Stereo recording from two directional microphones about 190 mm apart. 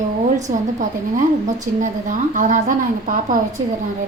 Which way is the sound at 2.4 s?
45° right (ahead or behind).